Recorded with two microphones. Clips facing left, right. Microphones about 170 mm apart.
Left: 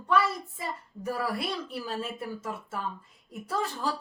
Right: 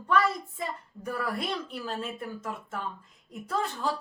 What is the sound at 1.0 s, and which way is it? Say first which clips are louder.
A woman's voice: left 1 dB; 5° left (ahead or behind).